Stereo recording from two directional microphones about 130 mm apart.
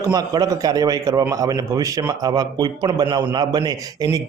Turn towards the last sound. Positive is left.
turn(degrees=-30)  # may be behind; listen again after turning